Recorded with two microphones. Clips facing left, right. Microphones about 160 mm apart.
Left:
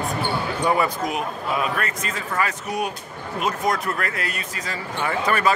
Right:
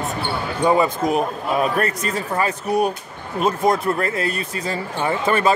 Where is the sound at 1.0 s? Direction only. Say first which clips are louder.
Right 6 dB; 40° right (ahead or behind).